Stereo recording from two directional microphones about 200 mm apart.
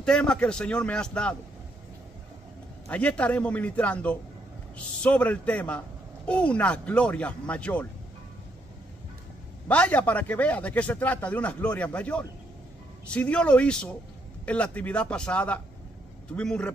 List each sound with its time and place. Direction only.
0.0 s a man's voice: 5° left (ahead or behind)
2.9 s speech: 5° left (ahead or behind)
9.7 s a man's voice: 5° left (ahead or behind)